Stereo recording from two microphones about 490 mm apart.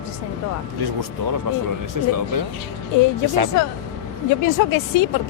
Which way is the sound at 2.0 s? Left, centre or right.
Right.